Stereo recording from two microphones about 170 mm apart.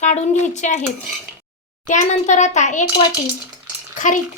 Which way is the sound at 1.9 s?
45° left (ahead or behind).